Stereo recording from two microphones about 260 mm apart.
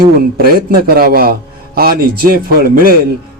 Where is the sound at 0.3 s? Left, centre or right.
Right.